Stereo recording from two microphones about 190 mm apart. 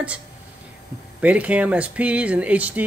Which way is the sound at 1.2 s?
5° right (ahead or behind).